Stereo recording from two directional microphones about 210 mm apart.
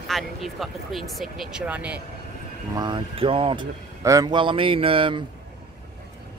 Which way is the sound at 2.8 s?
20° right (ahead or behind).